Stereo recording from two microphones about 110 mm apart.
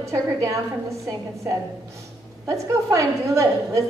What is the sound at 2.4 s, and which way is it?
A woman's voice, 30° right (ahead or behind).